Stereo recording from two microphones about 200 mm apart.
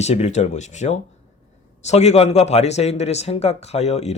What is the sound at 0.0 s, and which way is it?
A man's voice, 35° left (ahead or behind).